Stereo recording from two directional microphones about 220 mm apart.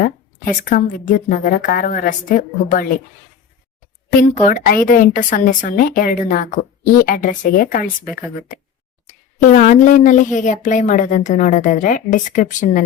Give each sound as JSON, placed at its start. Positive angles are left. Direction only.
{"t": 0.0, "sound": "a sound", "side_deg": 40}
{"t": 0.6, "sound": "a woman's voice", "side_deg": 35}
{"t": 4.2, "sound": "a woman's voice", "side_deg": 40}
{"t": 9.6, "sound": "a woman's voice", "side_deg": 35}